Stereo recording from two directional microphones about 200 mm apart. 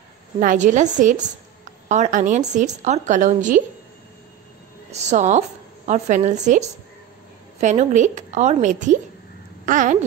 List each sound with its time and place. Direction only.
0.4 s a woman's voice: 40° right (ahead or behind)
4.9 s a woman's voice: 35° right (ahead or behind)